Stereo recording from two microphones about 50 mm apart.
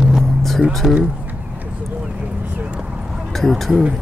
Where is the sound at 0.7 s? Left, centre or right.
Centre.